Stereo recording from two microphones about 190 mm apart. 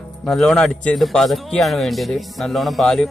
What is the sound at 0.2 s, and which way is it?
Speech, centre (ahead or behind).